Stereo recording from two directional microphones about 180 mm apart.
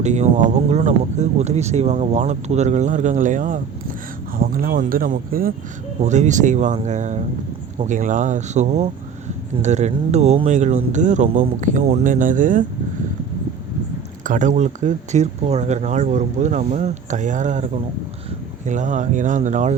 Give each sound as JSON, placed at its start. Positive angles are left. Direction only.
{"t": 0.0, "sound": "speech", "side_deg": -40}
{"t": 6.0, "sound": "speech", "side_deg": -40}
{"t": 14.3, "sound": "speech", "side_deg": -45}